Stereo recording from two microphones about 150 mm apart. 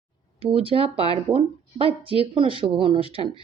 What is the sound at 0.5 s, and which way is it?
Speech, 40° right (ahead or behind).